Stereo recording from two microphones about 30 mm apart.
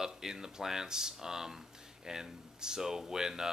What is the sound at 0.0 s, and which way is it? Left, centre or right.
Speech, centre.